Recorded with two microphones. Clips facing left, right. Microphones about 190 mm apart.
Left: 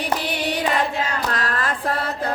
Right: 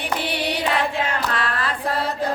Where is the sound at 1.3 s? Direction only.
45° left (ahead or behind).